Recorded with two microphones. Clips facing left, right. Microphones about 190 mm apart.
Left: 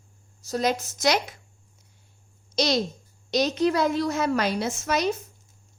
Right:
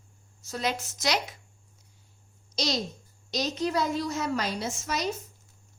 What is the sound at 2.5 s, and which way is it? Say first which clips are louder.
A child's voice: left 6 dB; 65° left (ahead or behind).